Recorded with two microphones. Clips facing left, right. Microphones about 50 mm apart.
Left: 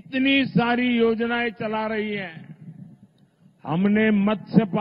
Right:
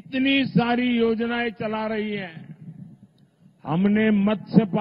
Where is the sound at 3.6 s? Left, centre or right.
Centre.